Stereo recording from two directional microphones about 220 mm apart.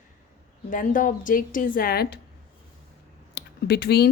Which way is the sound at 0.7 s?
35° left (ahead or behind).